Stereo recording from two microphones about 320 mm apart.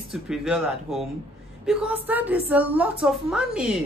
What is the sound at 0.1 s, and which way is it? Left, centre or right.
A woman's voice, centre.